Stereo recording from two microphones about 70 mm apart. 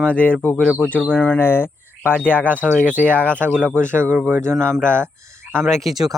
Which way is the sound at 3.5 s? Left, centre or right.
Centre.